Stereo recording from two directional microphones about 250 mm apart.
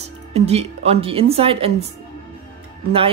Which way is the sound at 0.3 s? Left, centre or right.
Right.